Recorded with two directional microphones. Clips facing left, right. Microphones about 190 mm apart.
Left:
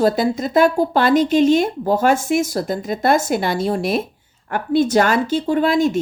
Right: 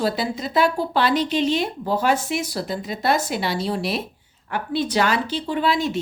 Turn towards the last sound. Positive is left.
turn(degrees=50)  # may be behind; listen again after turning